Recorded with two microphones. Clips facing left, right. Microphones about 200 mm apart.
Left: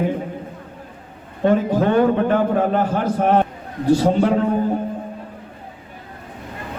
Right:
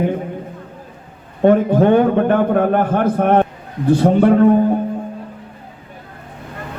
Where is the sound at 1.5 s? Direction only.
55° right (ahead or behind).